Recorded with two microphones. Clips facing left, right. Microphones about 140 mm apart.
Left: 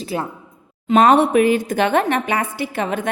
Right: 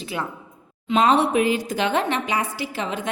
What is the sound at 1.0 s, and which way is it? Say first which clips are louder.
A woman's voice: left 5 dB; 55° left (ahead or behind).